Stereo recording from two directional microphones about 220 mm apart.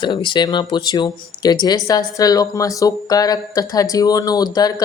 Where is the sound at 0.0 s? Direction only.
20° left (ahead or behind).